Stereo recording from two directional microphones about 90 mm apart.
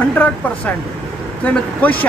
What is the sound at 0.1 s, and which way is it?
Speech, 15° left (ahead or behind).